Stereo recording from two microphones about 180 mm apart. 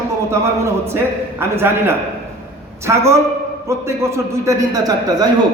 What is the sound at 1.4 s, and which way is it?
A man's voice, 15° right (ahead or behind).